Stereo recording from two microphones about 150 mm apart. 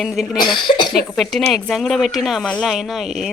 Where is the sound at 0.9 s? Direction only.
Centre (ahead or behind).